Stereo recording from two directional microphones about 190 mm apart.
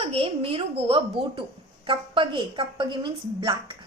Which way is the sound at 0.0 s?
30° right (ahead or behind).